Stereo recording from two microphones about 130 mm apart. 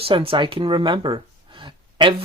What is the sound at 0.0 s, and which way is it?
Speech, 45° right (ahead or behind).